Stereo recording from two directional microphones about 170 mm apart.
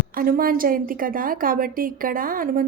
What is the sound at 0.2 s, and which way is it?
A woman's voice, 60° right (ahead or behind).